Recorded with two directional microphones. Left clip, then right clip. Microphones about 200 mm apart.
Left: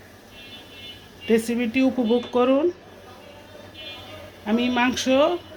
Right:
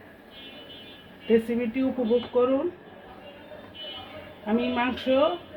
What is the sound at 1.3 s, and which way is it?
Speech, 40° left (ahead or behind).